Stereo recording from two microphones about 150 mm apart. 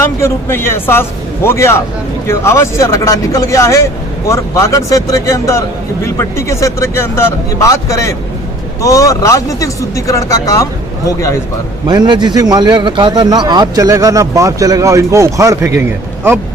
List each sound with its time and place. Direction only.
0.2 s a woman's voice: 15° left (ahead or behind)
11.9 s a man's voice: 30° right (ahead or behind)